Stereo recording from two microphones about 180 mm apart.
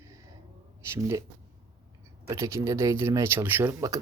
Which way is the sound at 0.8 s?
15° right (ahead or behind).